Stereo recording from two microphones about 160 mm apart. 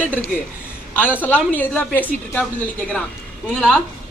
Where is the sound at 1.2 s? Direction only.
10° left (ahead or behind).